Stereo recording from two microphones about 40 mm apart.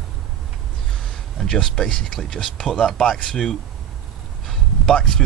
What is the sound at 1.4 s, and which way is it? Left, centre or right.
Speech, centre.